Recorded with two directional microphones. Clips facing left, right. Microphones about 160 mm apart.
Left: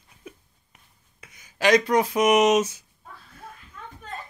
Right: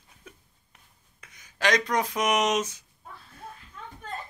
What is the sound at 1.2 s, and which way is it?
Speech, 10° left (ahead or behind).